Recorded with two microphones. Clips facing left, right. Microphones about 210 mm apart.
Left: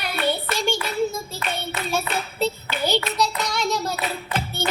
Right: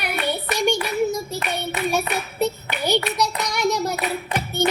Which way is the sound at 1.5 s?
15° right (ahead or behind).